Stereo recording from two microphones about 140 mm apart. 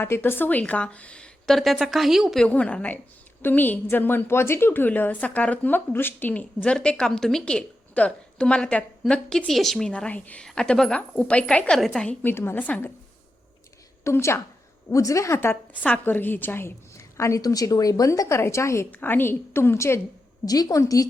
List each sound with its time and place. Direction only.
0.0 s a woman's voice: 15° left (ahead or behind)
14.0 s a woman's voice: 20° left (ahead or behind)